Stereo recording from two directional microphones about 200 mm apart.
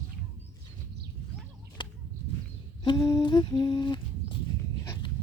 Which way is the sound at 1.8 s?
25° left (ahead or behind).